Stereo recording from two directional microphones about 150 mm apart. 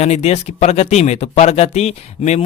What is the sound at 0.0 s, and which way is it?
Speech, 45° left (ahead or behind).